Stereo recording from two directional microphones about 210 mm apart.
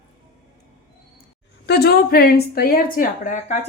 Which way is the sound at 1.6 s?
50° left (ahead or behind).